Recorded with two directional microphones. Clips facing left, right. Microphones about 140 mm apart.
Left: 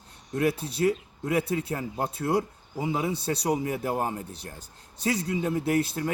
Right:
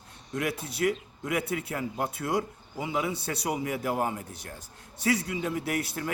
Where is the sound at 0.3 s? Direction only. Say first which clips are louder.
Left 5 dB; 30° left (ahead or behind).